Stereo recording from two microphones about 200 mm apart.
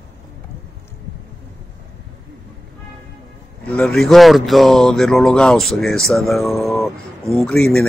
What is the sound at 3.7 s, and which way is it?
Speech, 5° left (ahead or behind).